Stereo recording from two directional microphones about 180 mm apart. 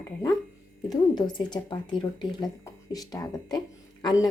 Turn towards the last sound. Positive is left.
turn(degrees=20)  # may be behind; listen again after turning